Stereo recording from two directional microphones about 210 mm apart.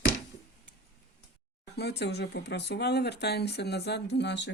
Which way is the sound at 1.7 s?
50° left (ahead or behind).